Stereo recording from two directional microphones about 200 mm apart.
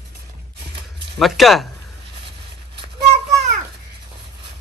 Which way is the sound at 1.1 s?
Centre (ahead or behind).